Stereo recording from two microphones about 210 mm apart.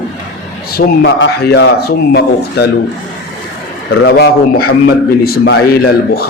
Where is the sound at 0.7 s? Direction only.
50° left (ahead or behind).